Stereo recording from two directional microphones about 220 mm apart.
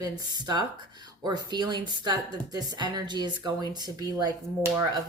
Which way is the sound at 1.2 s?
20° right (ahead or behind).